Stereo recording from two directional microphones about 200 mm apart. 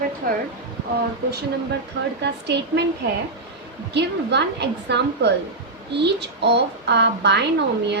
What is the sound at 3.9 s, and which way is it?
A woman's voice, 60° right (ahead or behind).